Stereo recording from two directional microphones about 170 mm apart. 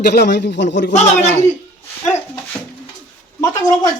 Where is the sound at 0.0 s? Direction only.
75° left (ahead or behind).